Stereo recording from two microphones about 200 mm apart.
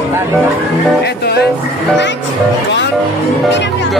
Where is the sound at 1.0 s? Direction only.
55° left (ahead or behind).